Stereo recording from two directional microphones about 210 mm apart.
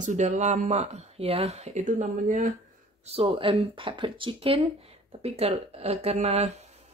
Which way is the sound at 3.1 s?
25° right (ahead or behind).